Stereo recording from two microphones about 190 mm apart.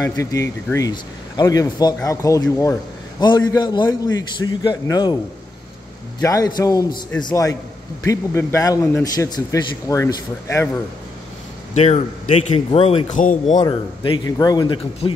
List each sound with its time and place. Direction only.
0.0 s a man's voice: 15° left (ahead or behind)
6.2 s a man's voice: 20° left (ahead or behind)
11.7 s a man's voice: 35° left (ahead or behind)
13.6 s a man's voice: 25° left (ahead or behind)